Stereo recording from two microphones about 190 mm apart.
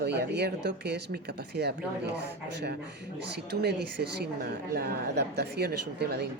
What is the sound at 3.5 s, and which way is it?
A woman's voice, 60° right (ahead or behind).